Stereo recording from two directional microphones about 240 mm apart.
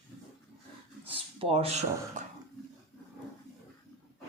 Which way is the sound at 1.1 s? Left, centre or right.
Right.